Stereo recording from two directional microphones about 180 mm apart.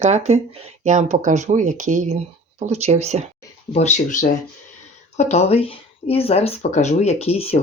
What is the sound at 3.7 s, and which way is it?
Speech, 40° left (ahead or behind).